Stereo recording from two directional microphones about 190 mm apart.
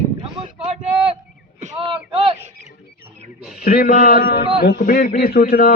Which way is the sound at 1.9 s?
30° right (ahead or behind).